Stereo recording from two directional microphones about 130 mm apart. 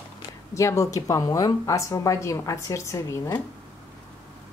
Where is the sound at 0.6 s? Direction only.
25° left (ahead or behind).